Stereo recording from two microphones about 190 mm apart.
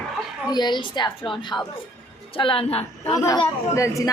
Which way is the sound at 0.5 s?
25° left (ahead or behind).